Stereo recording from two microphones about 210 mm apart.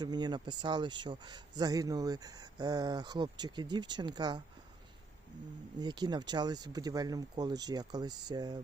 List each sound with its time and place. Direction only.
0.0 s a man's voice: 20° right (ahead or behind)
5.8 s a man's voice: 20° right (ahead or behind)